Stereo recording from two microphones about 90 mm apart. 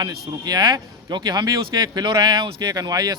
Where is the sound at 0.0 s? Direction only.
50° right (ahead or behind).